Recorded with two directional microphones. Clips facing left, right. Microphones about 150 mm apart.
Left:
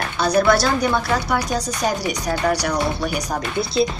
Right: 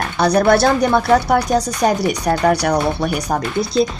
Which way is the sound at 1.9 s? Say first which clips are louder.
Right 5 dB; 60° right (ahead or behind).